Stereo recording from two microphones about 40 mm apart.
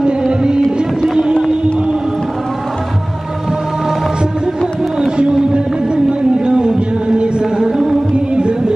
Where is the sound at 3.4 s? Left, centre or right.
Centre.